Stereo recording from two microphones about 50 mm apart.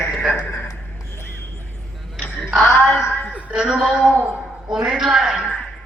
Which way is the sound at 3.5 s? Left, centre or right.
Centre.